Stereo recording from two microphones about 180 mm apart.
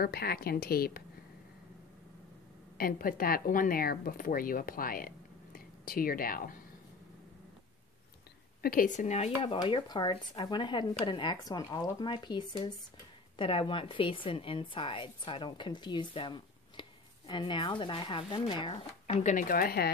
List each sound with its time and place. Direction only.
0.0 s speech: 60° left (ahead or behind)
2.8 s speech: 55° left (ahead or behind)
8.6 s speech: 50° left (ahead or behind); by 18.8 s 25° left (ahead or behind)
19.0 s speech: 45° left (ahead or behind)